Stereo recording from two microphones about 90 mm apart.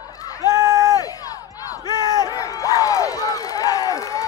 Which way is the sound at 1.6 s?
40° left (ahead or behind).